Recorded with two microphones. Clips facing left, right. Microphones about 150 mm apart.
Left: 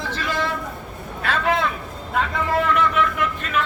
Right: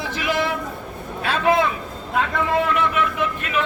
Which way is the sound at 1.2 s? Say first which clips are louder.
Right 3 dB; 15° right (ahead or behind).